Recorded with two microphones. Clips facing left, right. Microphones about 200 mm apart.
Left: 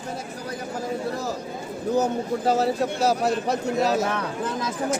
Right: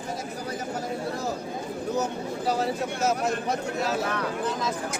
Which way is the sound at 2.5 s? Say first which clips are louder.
Left 4 dB; 40° left (ahead or behind).